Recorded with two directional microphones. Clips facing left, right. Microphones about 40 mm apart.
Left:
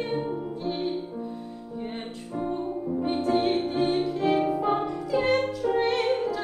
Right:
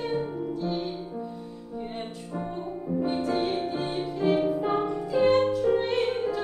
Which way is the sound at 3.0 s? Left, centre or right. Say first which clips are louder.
Left 3 dB; left.